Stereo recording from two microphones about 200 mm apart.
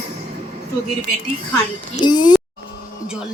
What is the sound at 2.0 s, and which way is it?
Speech, 20° left (ahead or behind).